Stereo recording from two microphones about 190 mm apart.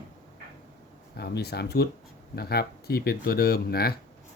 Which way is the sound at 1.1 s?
60° left (ahead or behind).